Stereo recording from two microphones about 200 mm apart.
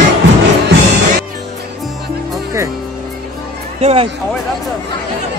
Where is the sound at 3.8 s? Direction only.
30° right (ahead or behind).